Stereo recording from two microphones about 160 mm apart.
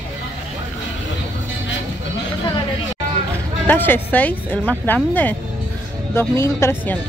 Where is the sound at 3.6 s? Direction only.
10° left (ahead or behind).